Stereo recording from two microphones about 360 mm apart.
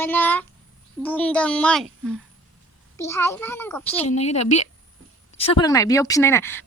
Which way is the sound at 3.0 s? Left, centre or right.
Centre.